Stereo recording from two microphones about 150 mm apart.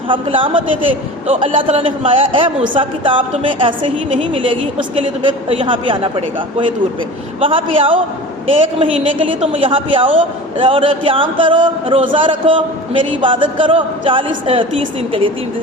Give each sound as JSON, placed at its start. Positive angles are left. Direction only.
{"t": 0.1, "sound": "a man's voice", "side_deg": -35}